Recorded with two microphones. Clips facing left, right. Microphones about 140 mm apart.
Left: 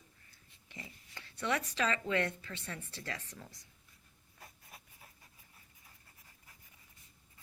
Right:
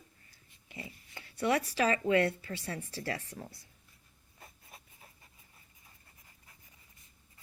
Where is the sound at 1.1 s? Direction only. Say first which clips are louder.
Right 7 dB; 25° right (ahead or behind).